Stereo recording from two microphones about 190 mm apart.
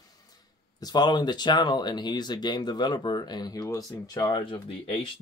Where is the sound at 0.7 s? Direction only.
20° left (ahead or behind).